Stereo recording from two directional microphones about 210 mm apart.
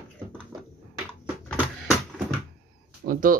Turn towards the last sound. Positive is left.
turn(degrees=-40)  # may be behind; listen again after turning